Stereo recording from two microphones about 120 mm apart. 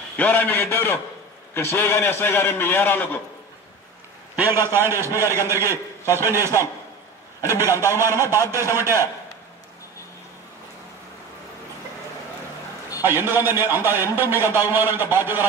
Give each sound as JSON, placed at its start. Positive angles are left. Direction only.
{"t": 0.2, "sound": "a man's voice", "side_deg": 15}
{"t": 4.4, "sound": "a man's voice", "side_deg": -20}
{"t": 13.0, "sound": "a man's voice", "side_deg": -20}